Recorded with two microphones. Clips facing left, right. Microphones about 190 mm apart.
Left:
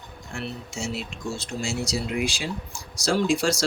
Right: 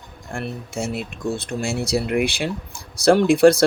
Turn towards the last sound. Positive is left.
turn(degrees=-60)  # may be behind; listen again after turning